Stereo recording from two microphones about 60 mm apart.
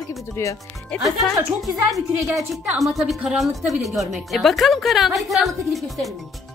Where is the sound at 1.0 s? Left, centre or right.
Centre.